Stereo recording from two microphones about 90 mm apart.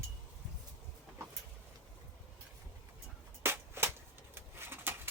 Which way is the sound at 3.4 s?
25° right (ahead or behind).